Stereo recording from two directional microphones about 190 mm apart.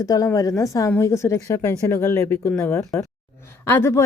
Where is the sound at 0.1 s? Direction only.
20° left (ahead or behind).